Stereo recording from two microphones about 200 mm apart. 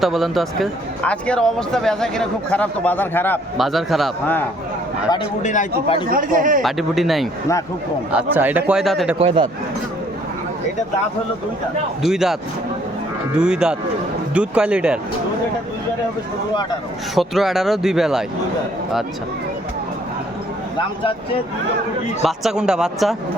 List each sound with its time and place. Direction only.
0.0 s speech: centre (ahead or behind)
5.1 s a man's voice: 35° left (ahead or behind)
6.1 s a man's voice: 45° right (ahead or behind)
6.6 s a man's voice: centre (ahead or behind)
9.1 s speech: 25° right (ahead or behind)
12.0 s speech: centre (ahead or behind)
17.2 s speech: centre (ahead or behind)
22.2 s speech: centre (ahead or behind)